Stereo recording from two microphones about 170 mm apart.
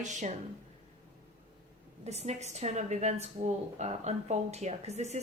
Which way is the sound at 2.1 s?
40° right (ahead or behind).